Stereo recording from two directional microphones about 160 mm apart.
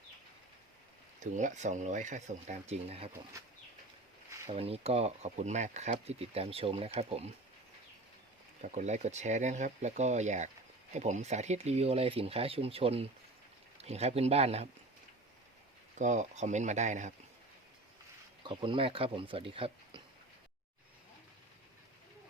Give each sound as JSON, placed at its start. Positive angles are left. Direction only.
{"t": 1.2, "sound": "speech", "side_deg": -50}
{"t": 4.5, "sound": "speech", "side_deg": -40}
{"t": 8.6, "sound": "speech", "side_deg": -45}
{"t": 16.0, "sound": "speech", "side_deg": -50}
{"t": 18.4, "sound": "speech", "side_deg": -30}